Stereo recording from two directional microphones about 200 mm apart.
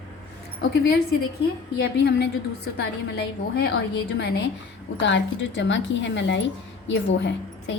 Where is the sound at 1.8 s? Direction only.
60° left (ahead or behind).